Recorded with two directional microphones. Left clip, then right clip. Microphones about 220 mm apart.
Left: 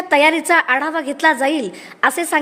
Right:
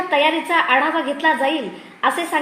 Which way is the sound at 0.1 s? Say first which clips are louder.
Left 5 dB; 45° left (ahead or behind).